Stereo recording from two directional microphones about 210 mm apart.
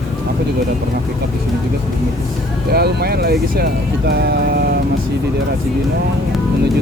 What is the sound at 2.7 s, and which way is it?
Speech, 50° right (ahead or behind).